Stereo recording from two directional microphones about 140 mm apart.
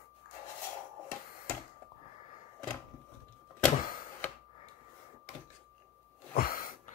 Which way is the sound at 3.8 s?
80° left.